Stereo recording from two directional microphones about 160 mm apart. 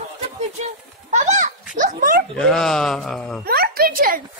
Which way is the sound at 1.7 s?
60° right (ahead or behind).